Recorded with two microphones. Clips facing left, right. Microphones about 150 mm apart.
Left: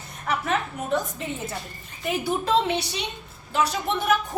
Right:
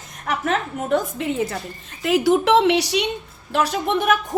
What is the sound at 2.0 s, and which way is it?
A woman's voice, 90° right.